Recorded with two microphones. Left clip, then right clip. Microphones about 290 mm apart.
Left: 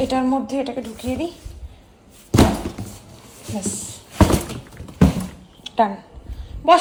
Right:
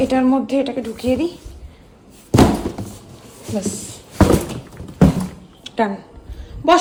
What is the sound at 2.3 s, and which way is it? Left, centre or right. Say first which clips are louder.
Thunk: right 3 dB; centre.